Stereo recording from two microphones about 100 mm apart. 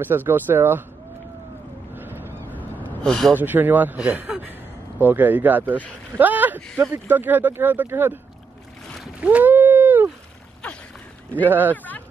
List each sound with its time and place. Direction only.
0.0 s speech: 20° right (ahead or behind)
2.0 s vehicle: 20° right (ahead or behind)
3.0 s speech: 5° left (ahead or behind)
3.3 s a man's voice: 20° right (ahead or behind)
8.8 s splash: 5° left (ahead or behind)
9.2 s boat: 15° right (ahead or behind)
11.4 s speech: 20° right (ahead or behind)
11.7 s speech: 15° left (ahead or behind)